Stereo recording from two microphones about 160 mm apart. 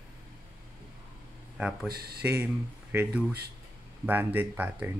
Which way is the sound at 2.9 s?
10° right (ahead or behind).